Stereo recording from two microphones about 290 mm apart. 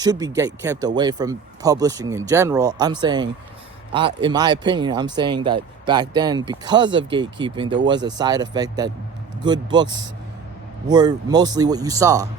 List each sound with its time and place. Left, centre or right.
0.0 s speech: centre